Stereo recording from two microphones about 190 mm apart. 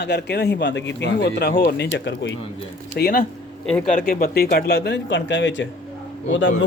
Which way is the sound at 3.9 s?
50° left (ahead or behind).